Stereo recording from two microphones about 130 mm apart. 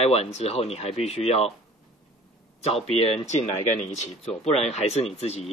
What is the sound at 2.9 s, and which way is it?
Speech, 55° left (ahead or behind).